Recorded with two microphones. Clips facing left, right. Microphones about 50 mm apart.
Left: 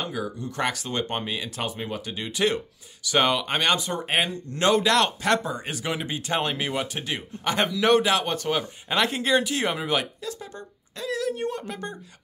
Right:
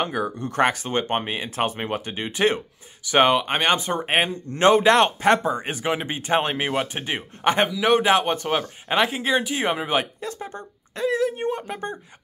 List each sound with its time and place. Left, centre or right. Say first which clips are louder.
0.0 s speech: right 5 dB; right
2.0 s speech: right 2 dB; right
7.6 s speech: left 2 dB; centre
8.0 s speech: right 4 dB; right
9.0 s speech: left 1 dB; centre
10.2 s speech: right 3 dB; right